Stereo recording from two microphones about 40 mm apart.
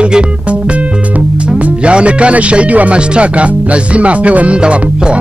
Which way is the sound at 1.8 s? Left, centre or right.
Right.